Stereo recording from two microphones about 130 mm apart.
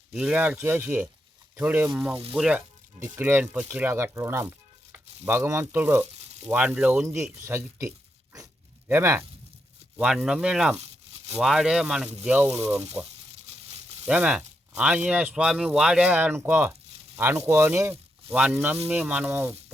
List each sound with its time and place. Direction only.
0.1 s speech: 5° right (ahead or behind)
6.1 s frying: 55° right (ahead or behind)
6.5 s speech: 15° right (ahead or behind)
10.0 s speech: 5° right (ahead or behind)
13.4 s a sound: 55° right (ahead or behind)
14.1 s speech: 10° right (ahead or behind)